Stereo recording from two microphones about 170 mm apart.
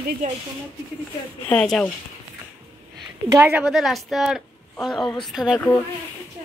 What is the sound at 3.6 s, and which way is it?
Speech, centre (ahead or behind).